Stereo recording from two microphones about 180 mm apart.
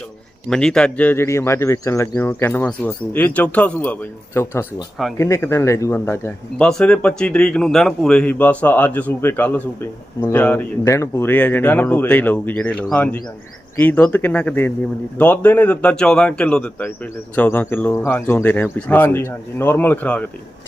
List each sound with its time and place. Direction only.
0.5 s speech: 5° left (ahead or behind)
6.6 s speech: 5° left (ahead or behind)